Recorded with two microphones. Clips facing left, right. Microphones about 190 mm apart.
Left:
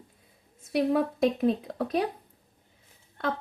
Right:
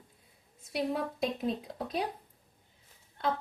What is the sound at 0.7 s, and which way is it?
A woman's voice, 55° left (ahead or behind).